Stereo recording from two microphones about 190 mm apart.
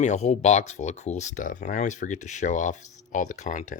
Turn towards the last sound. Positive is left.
turn(degrees=40)  # may be behind; listen again after turning